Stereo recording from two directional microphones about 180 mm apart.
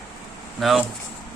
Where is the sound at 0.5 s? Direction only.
Centre (ahead or behind).